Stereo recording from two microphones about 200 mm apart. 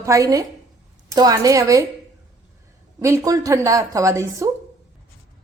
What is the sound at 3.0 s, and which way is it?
A woman's voice, 15° right (ahead or behind).